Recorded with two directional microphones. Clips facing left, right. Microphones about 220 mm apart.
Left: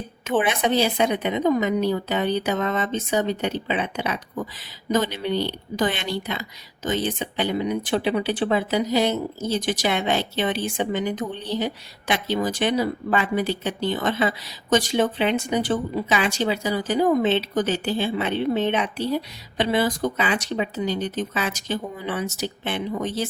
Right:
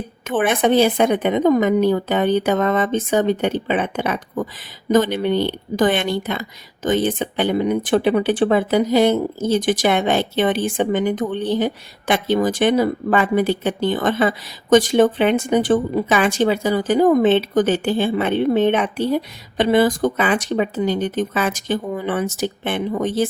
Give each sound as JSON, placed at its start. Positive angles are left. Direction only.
{"t": 0.3, "sound": "speech", "side_deg": -50}